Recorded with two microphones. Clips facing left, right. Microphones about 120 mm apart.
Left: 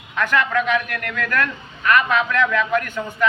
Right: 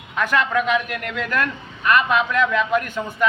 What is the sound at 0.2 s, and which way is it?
A man's voice, 15° right (ahead or behind).